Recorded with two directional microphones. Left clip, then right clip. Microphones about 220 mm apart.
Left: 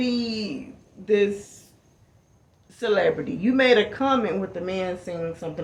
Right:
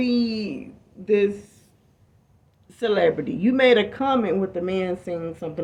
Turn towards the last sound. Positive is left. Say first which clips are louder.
# right 1 dB
turn(degrees=-40)  # may be behind; listen again after turning